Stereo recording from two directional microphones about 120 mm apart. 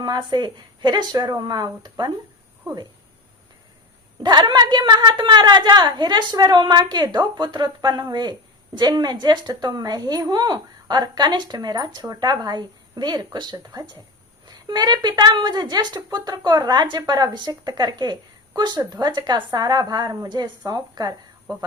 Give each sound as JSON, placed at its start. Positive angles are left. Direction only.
{"t": 0.0, "sound": "a woman's voice", "side_deg": -35}
{"t": 4.2, "sound": "a woman's voice", "side_deg": -40}